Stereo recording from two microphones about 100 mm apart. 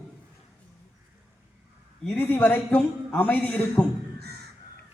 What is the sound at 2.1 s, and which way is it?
A man's voice, 15° left (ahead or behind).